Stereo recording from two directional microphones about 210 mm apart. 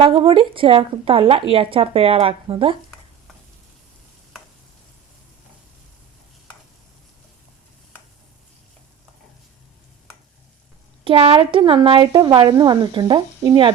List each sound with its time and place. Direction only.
0.0 s speech: 25° right (ahead or behind)
11.0 s speech: 25° right (ahead or behind)